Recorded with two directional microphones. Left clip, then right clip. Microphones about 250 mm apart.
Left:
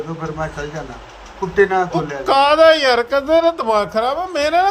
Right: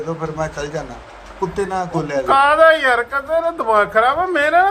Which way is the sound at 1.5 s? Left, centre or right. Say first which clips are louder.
Left 9 dB; right.